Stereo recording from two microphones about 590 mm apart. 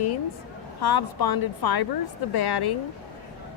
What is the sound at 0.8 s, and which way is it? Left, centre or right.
Speech, left.